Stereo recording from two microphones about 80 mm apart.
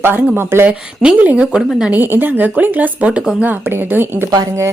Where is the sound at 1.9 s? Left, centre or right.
Right.